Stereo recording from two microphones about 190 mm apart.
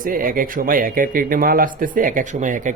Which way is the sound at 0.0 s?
50° right (ahead or behind).